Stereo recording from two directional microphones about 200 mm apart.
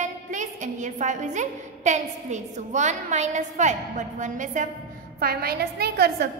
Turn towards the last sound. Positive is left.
turn(degrees=-55)  # may be behind; listen again after turning